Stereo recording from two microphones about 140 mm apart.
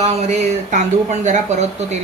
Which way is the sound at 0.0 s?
55° right (ahead or behind).